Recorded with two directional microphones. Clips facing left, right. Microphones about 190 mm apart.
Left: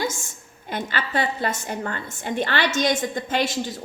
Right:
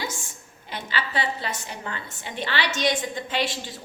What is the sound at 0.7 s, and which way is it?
A woman's voice, 50° left (ahead or behind).